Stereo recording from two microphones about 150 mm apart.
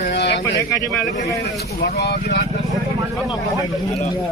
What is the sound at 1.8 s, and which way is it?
Speech, 90° left.